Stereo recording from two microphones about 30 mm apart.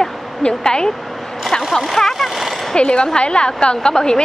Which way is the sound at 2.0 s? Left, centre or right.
Left.